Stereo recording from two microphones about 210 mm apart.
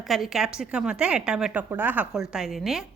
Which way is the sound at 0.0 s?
Centre (ahead or behind).